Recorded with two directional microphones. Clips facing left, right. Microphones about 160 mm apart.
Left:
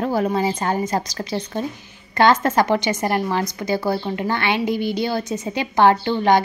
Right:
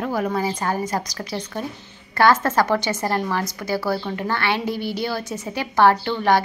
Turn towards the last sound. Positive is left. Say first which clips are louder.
# left 2 dB
turn(degrees=20)  # may be behind; listen again after turning